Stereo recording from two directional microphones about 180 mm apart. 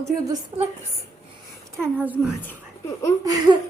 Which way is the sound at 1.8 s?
10° right (ahead or behind).